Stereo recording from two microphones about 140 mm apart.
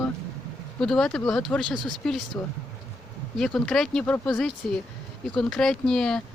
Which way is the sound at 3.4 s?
5° left (ahead or behind).